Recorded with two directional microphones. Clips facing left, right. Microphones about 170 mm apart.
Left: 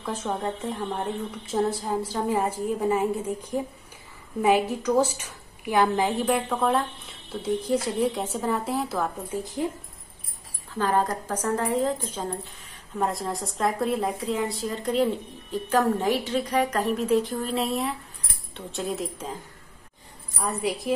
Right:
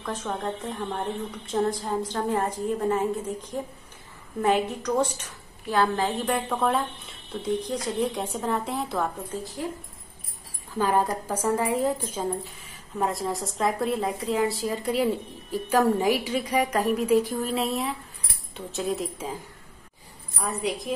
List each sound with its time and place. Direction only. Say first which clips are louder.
0.0 s a woman's voice: left 1 dB; 10° left (ahead or behind)
6.2 s speech: left 1 dB; centre (ahead or behind)
9.3 s speech: left 4 dB; 20° left (ahead or behind)
10.8 s a woman's voice: right 1 dB; 10° right (ahead or behind)
20.3 s speech: left 1 dB; centre (ahead or behind)